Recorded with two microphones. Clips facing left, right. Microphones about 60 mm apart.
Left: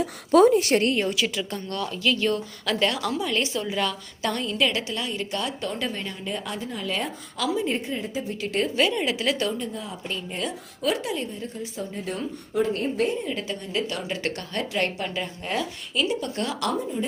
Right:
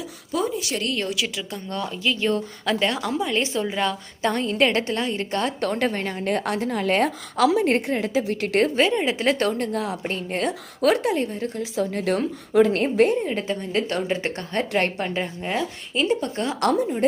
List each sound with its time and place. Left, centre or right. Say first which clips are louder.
0.0 s a woman's voice: left 9 dB; left
1.1 s a woman's voice: left 1 dB; centre
1.6 s a woman's voice: right 1 dB; right
5.5 s a woman's voice: right 6 dB; right
8.7 s a woman's voice: right 3 dB; right
10.1 s a woman's voice: right 1 dB; right
12.6 s a woman's voice: right 6 dB; right
13.2 s a woman's voice: right 4 dB; right
15.4 s a woman's voice: right 2 dB; right
16.0 s a woman's voice: right 6 dB; right
16.7 s a woman's voice: right 7 dB; right